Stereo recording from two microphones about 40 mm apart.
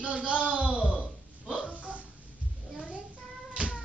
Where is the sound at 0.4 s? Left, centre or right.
Right.